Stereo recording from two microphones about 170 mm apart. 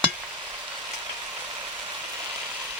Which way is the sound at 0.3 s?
25° right (ahead or behind).